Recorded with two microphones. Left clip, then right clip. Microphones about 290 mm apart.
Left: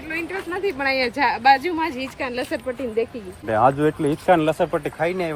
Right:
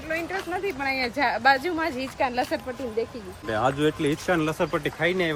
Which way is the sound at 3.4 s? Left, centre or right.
Centre.